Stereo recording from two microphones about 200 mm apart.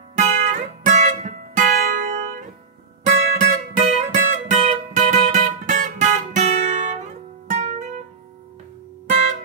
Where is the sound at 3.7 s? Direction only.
35° right (ahead or behind).